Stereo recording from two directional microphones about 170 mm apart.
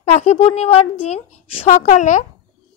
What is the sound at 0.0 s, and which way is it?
Speech, 40° left (ahead or behind).